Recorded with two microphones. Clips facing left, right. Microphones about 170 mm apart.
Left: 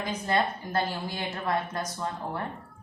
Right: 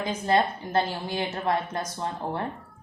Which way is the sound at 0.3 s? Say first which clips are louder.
Right 4 dB; 25° right (ahead or behind).